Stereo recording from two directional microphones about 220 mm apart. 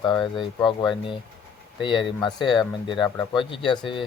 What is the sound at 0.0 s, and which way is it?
Speech, 20° left (ahead or behind).